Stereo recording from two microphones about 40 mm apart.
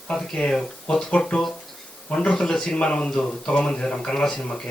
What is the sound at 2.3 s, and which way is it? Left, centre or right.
Speech, centre.